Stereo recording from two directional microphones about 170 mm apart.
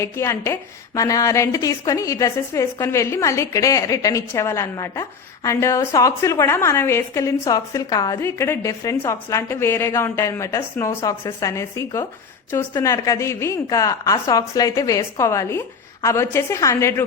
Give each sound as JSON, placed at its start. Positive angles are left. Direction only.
{"t": 0.0, "sound": "a woman's voice", "side_deg": 15}